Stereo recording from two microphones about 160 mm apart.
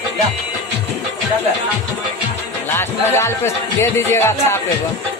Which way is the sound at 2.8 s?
15° left (ahead or behind).